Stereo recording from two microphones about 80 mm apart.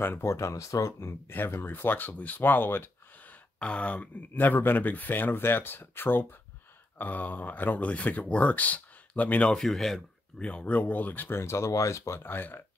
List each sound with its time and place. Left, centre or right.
0.0 s speech: left
3.5 s speech: centre; by 12.2 s left
12.2 s speech: left